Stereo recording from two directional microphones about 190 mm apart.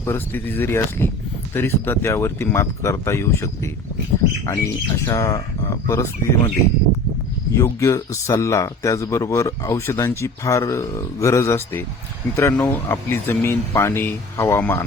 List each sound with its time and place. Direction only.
0.0 s speech: 10° left (ahead or behind)
7.5 s speech: 15° left (ahead or behind)